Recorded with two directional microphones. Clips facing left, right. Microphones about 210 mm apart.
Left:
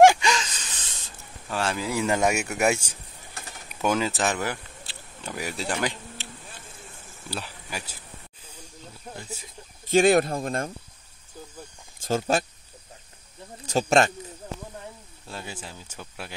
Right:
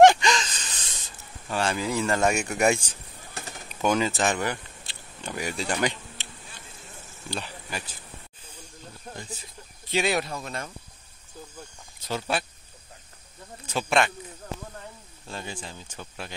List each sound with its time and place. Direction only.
0.0 s a sound: 10° left (ahead or behind)
1.5 s speech: centre (ahead or behind)
2.0 s speech: 10° left (ahead or behind)
3.6 s a sound: 5° left (ahead or behind)
7.2 s speech: 5° left (ahead or behind)
9.1 s speech: 5° left (ahead or behind)
9.8 s speech: 50° left (ahead or behind)
12.0 s speech: 45° left (ahead or behind)
13.7 s speech: 40° left (ahead or behind)
15.2 s speech: 5° left (ahead or behind)